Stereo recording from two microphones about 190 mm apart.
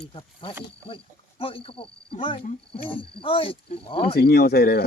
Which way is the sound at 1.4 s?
30° left (ahead or behind).